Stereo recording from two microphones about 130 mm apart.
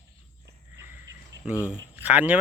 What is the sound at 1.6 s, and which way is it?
Speech, 10° right (ahead or behind).